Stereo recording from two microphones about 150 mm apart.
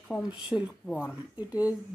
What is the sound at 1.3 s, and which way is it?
Speech, 10° right (ahead or behind).